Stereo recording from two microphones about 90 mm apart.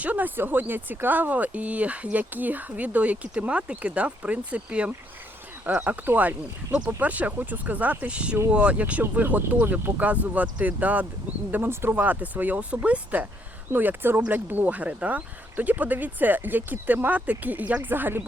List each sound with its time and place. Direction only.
0.0 s speech: 20° right (ahead or behind)